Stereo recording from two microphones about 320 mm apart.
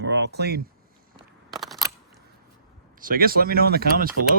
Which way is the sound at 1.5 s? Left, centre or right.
Centre.